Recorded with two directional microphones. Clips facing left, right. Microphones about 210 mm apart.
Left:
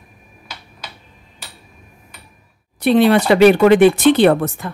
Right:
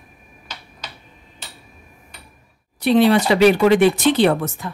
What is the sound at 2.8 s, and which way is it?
Speech, 55° left (ahead or behind).